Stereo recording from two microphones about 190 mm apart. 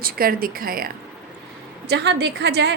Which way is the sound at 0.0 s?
50° right (ahead or behind).